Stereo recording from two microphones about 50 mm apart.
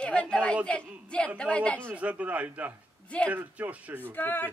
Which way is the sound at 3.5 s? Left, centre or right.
Right.